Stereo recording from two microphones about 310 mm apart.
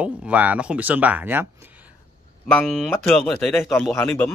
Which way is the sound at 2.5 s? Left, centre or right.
Centre.